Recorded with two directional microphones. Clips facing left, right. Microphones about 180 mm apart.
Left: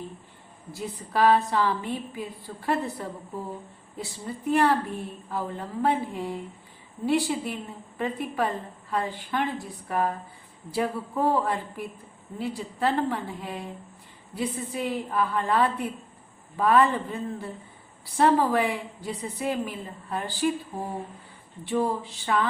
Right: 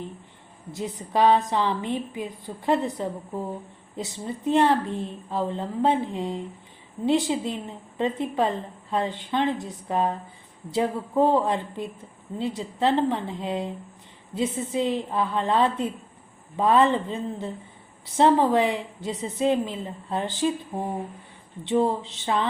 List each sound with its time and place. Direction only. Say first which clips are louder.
0.7 s a woman's voice: right 3 dB; 20° right (ahead or behind)
21.6 s a woman's voice: right 3 dB; 20° right (ahead or behind)